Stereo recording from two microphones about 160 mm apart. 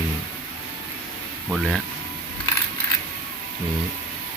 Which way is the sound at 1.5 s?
Centre (ahead or behind).